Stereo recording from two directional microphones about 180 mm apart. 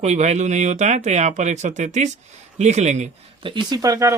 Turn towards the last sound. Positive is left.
turn(degrees=-15)  # may be behind; listen again after turning